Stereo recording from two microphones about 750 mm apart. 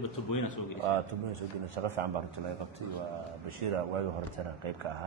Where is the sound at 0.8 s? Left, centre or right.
Right.